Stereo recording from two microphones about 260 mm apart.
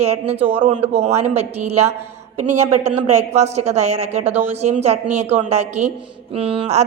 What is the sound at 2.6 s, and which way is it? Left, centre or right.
Speech, right.